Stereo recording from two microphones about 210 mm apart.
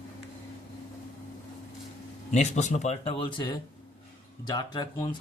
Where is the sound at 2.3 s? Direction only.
35° left (ahead or behind).